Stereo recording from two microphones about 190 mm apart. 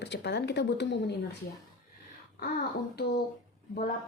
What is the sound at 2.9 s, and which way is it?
Speech, 60° left (ahead or behind).